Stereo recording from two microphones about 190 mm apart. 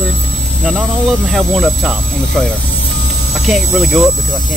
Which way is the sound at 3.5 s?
Centre (ahead or behind).